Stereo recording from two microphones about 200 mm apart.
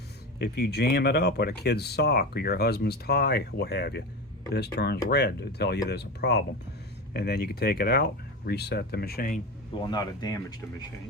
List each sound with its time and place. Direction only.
0.3 s speech: 55° left (ahead or behind)
9.7 s speech: 20° left (ahead or behind)